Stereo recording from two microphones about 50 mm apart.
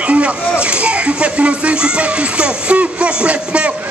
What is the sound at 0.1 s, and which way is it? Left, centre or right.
Speech, right.